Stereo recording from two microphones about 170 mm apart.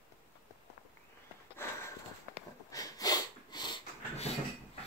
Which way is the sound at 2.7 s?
20° left (ahead or behind).